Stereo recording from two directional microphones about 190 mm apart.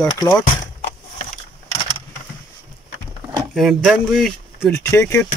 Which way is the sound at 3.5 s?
Centre (ahead or behind).